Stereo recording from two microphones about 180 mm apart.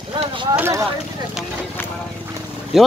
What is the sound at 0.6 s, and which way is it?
Speech, 15° right (ahead or behind).